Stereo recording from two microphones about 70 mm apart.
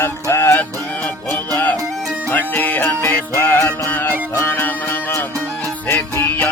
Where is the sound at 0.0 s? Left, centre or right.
Left.